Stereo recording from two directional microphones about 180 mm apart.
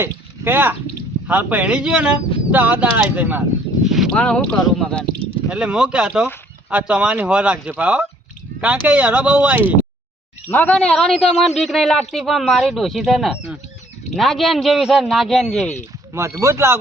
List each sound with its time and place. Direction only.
0.0 s a man's voice: 10° right (ahead or behind)
10.5 s a man's voice: 10° left (ahead or behind)
16.1 s speech: 15° right (ahead or behind)